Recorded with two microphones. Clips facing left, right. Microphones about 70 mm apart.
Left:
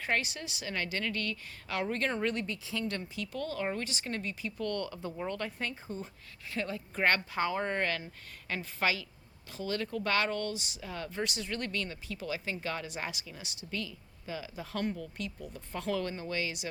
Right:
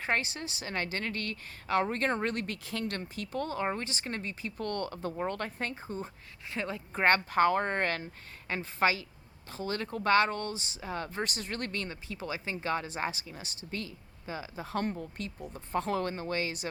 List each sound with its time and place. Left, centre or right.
0.0 s speech: right
3.0 s speech: right
6.5 s speech: right
7.3 s speech: right
8.4 s speech: right